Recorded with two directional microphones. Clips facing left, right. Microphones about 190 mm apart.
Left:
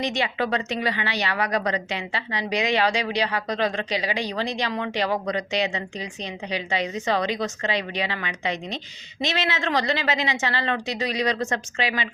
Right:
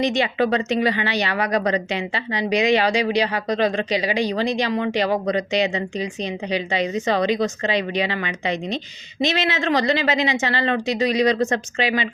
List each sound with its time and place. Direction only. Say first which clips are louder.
0.0 s speech: right 6 dB; 20° right (ahead or behind)